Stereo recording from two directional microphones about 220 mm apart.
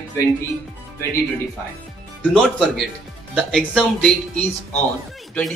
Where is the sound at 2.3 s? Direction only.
Centre (ahead or behind).